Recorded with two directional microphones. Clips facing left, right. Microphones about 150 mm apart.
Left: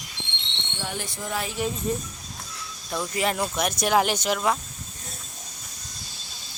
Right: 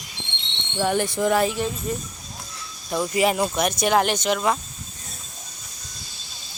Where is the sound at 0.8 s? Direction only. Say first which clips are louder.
Right 12 dB; 60° right (ahead or behind).